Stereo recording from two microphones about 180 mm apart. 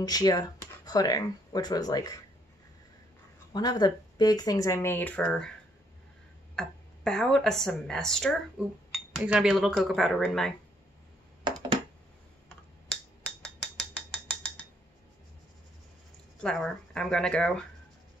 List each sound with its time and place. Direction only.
0.0 s speech: 20° left (ahead or behind)
3.5 s speech: 20° left (ahead or behind); by 5.5 s 5° left (ahead or behind)
6.6 s speech: 5° left (ahead or behind)
11.4 s a sound: 25° right (ahead or behind)
13.9 s mechanisms: 5° left (ahead or behind)
16.4 s speech: 5° left (ahead or behind)